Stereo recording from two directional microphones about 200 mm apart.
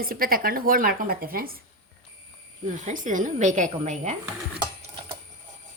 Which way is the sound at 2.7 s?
40° right (ahead or behind).